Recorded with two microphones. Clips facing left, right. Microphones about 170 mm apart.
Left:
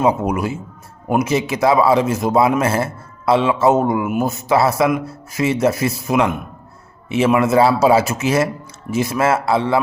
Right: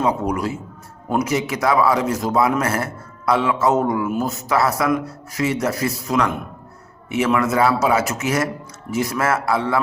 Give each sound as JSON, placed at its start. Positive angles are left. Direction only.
{"t": 0.0, "sound": "a man's voice", "side_deg": 25}